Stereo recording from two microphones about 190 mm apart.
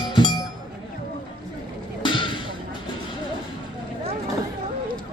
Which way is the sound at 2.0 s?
25° left (ahead or behind).